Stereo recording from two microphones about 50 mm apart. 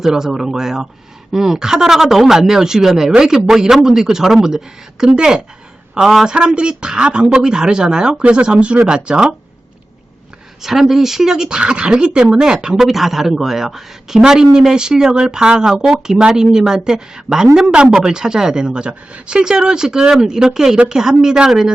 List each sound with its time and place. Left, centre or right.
0.0 s speech: centre
10.6 s speech: centre